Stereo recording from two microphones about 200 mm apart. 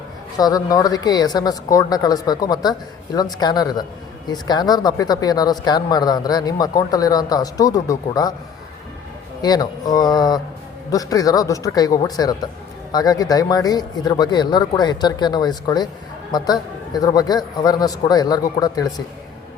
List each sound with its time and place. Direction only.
0.3 s speech: 20° left (ahead or behind)
9.4 s speech: 20° left (ahead or behind)